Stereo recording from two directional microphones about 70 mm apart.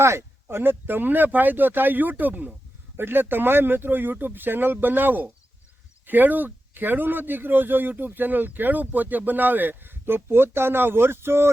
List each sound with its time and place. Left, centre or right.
0.0 s speech: right